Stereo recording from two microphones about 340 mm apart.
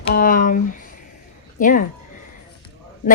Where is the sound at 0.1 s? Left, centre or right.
Left.